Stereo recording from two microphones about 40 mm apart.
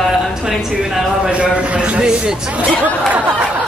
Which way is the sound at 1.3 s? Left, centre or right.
Right.